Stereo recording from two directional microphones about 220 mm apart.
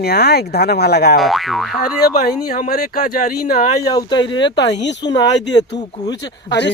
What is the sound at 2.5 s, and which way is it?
Speech, 40° left (ahead or behind).